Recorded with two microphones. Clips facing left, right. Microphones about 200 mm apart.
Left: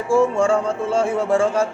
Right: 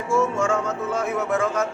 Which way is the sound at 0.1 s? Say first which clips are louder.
Left 5 dB; 30° left (ahead or behind).